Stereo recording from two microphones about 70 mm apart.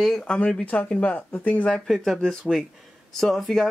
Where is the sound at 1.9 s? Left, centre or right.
Centre.